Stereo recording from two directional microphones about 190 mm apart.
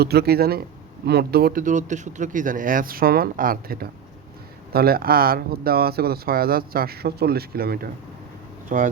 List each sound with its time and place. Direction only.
0.0 s speech: 55° right (ahead or behind)